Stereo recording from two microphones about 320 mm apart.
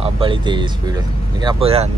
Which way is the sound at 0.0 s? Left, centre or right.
Centre.